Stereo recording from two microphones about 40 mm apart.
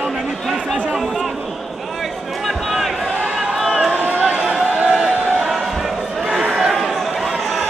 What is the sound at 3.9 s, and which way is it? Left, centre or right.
Run, right.